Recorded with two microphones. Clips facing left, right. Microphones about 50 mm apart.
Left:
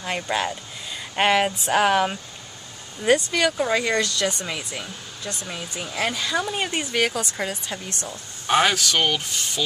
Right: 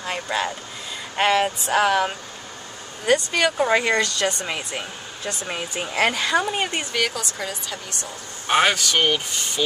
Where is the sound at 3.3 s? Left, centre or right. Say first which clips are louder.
Right 2 dB; right.